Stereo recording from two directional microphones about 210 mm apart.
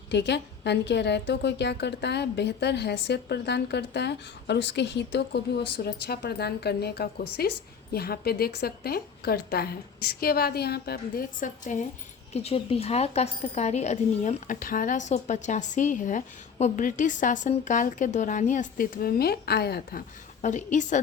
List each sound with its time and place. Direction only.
0.1 s a woman's voice: 55° left (ahead or behind)
20.4 s a woman's voice: 35° left (ahead or behind)